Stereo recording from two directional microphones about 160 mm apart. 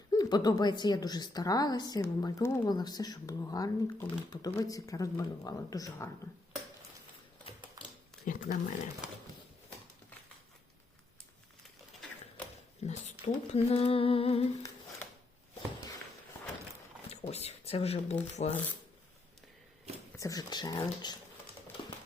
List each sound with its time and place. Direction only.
0.1 s a woman's voice: 25° left (ahead or behind)
7.8 s a sound: 20° right (ahead or behind)
8.2 s speech: 55° left (ahead or behind)
12.8 s a sound: 45° left (ahead or behind)
17.1 s speech: 40° left (ahead or behind)
20.1 s a woman's voice: 20° left (ahead or behind)